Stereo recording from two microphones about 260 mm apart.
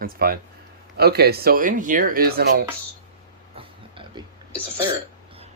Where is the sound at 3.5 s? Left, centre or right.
Centre.